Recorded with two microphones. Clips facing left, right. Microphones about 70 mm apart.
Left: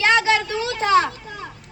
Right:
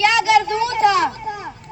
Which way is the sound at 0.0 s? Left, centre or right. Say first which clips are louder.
Right 3 dB; left.